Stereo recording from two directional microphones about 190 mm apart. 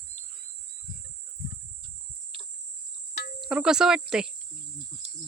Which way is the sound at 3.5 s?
5° right (ahead or behind).